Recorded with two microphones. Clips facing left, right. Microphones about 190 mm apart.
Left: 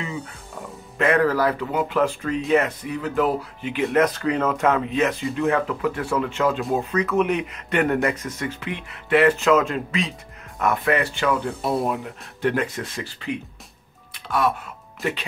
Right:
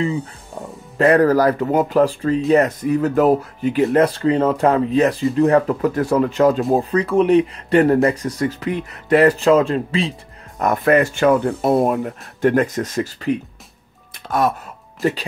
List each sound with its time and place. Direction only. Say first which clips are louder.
0.6 s music: right 5 dB; 35° right (ahead or behind)
0.9 s speech: right 6 dB; 35° right (ahead or behind)
10.6 s speech: right 6 dB; 40° right (ahead or behind)
14.1 s music: right 3 dB; 45° right (ahead or behind)